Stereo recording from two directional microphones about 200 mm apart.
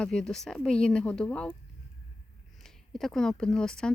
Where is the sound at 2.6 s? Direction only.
Centre (ahead or behind).